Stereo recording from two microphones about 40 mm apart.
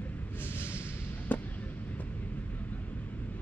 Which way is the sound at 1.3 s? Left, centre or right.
Left.